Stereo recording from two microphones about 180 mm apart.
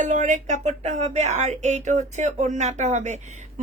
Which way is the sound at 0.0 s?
45° right (ahead or behind).